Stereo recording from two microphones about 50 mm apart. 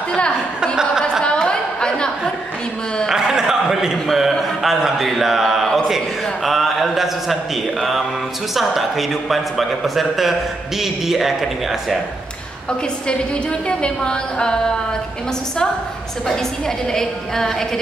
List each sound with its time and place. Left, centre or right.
1.2 s a sound: centre
3.1 s a sound: centre
4.3 s speech: centre
5.1 s mantra: centre
5.9 s speech: centre
8.5 s speech: centre
13.7 s a woman's voice: centre
16.3 s a woman's voice: centre